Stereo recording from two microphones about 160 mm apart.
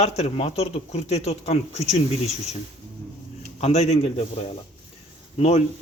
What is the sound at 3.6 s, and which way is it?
Speech, 45° left (ahead or behind).